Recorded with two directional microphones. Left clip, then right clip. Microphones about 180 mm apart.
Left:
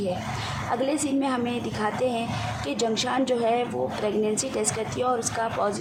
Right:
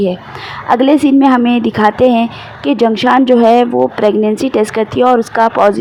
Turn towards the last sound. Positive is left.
turn(degrees=-40)  # may be behind; listen again after turning